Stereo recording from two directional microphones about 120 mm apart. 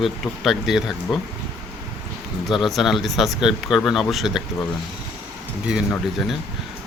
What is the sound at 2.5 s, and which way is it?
Speech, centre (ahead or behind).